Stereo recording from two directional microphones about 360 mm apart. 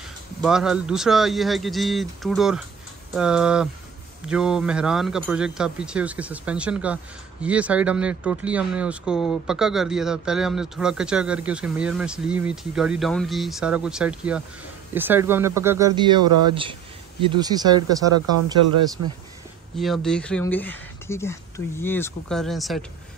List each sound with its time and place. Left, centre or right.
0.4 s speech: centre
19.0 s speech: right
19.8 s speech: centre